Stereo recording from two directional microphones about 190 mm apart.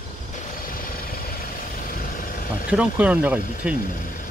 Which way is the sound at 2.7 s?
5° right (ahead or behind).